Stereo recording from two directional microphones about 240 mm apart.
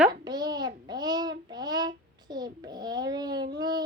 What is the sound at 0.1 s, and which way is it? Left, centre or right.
Child singing, centre.